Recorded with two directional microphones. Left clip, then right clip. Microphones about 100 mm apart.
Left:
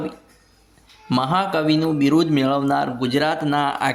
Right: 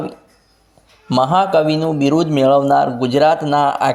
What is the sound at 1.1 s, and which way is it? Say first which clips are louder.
Speech: right 7 dB; 25° right (ahead or behind).